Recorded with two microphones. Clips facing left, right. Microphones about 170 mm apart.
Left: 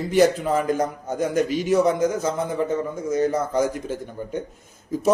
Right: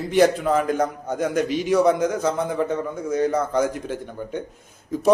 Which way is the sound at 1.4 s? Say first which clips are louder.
Even; 45° left (ahead or behind).